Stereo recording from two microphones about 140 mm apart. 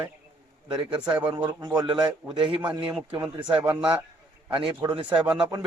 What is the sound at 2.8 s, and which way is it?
Speech, 5° right (ahead or behind).